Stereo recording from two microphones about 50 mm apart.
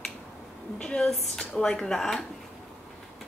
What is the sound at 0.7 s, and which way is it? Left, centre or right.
Speech, centre.